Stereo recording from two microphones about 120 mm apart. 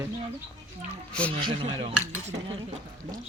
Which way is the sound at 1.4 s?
40° right (ahead or behind).